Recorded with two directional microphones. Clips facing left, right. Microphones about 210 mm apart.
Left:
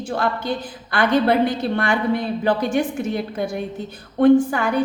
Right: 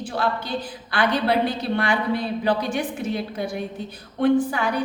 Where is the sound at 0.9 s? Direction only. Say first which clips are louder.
Left 4 dB; 50° left (ahead or behind).